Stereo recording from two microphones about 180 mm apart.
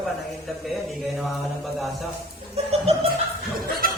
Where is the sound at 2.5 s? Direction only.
35° right (ahead or behind).